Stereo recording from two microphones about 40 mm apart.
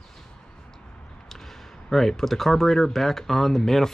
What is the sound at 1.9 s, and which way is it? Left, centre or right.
Speech, centre.